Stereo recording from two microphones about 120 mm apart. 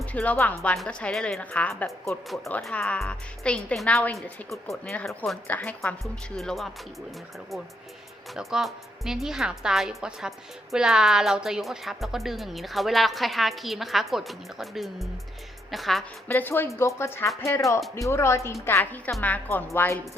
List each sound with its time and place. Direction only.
0.0 s a woman's voice: 10° left (ahead or behind)
2.0 s a woman's voice: centre (ahead or behind)
5.5 s a woman's voice: 15° left (ahead or behind)
6.0 s a woman's voice: centre (ahead or behind)
8.3 s a woman's voice: centre (ahead or behind)
16.3 s a woman's voice: 15° left (ahead or behind)